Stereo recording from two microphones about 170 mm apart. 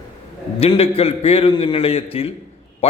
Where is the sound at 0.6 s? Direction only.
35° left (ahead or behind).